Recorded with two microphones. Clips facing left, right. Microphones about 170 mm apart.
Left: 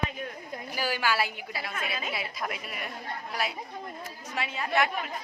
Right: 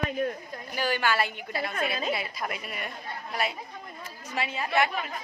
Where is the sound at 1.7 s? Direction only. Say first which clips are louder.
Right 5 dB; 50° right (ahead or behind).